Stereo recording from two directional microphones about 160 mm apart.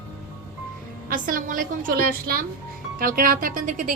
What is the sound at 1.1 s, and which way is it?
A woman's voice, 60° right (ahead or behind).